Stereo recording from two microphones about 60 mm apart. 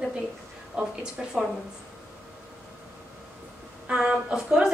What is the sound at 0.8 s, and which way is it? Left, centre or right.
Speech, centre.